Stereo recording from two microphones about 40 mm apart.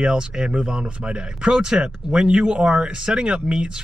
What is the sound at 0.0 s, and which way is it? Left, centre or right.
Speech, right.